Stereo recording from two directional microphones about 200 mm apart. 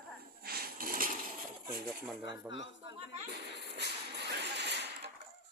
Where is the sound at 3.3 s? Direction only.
55° right (ahead or behind).